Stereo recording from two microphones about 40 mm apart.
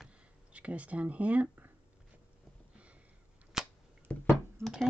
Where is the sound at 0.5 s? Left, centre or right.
Right.